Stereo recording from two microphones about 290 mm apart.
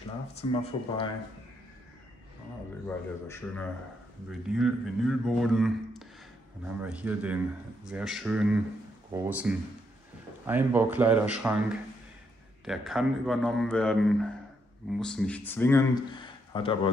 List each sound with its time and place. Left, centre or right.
0.3 s speech: centre
3.3 s speech: centre